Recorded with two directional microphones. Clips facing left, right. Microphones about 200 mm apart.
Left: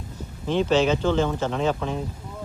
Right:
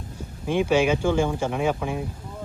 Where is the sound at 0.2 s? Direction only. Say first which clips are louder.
Even; 10° right (ahead or behind).